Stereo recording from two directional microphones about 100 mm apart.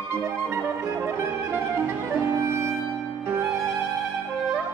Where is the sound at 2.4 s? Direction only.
30° right (ahead or behind).